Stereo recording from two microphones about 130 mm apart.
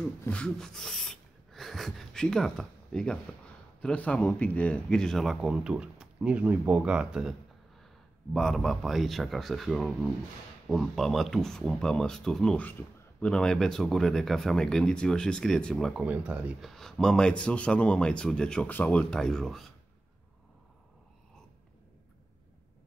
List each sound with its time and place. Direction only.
0.3 s a sound: 5° left (ahead or behind)
3.8 s speech: 10° left (ahead or behind)
16.0 s speech: 10° right (ahead or behind)
16.7 s a man's voice: 5° left (ahead or behind)